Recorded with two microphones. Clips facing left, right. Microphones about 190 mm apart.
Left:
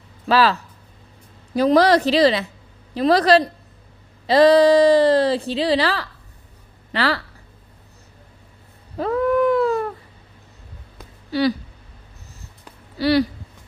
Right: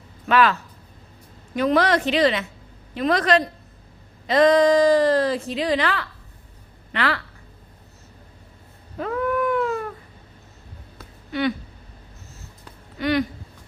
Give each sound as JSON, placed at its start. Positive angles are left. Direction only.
{"t": 0.3, "sound": "speech", "side_deg": 35}
{"t": 9.0, "sound": "a sound", "side_deg": 35}
{"t": 11.3, "sound": "speech", "side_deg": 35}
{"t": 13.0, "sound": "speech", "side_deg": 35}